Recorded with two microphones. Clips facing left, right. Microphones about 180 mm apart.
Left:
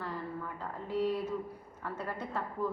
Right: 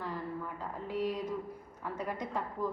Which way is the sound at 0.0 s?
10° right (ahead or behind).